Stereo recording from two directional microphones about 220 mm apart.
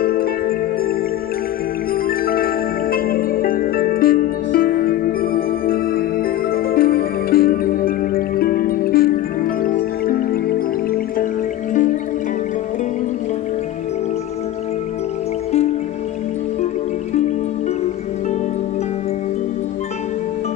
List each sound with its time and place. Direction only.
0.0 s music: 40° left (ahead or behind)
2.0 s music: 40° left (ahead or behind)
11.7 s music: 35° left (ahead or behind)